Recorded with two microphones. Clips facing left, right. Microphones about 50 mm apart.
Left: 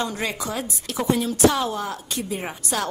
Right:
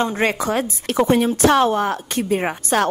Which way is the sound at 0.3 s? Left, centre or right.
Right.